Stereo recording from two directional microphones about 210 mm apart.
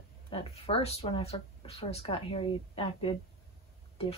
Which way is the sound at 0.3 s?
25° left (ahead or behind).